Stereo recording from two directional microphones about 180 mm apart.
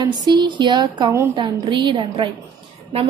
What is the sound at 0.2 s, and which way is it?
A woman's voice, 25° right (ahead or behind).